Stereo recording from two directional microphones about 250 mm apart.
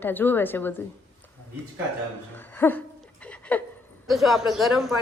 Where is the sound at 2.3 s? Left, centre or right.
Centre.